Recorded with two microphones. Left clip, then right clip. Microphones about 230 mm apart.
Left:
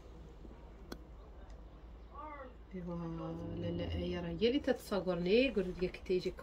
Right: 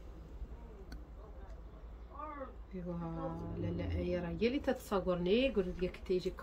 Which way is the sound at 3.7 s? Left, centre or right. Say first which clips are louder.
Right 5 dB; centre.